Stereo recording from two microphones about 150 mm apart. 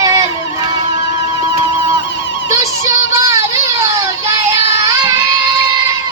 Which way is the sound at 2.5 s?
20° right (ahead or behind).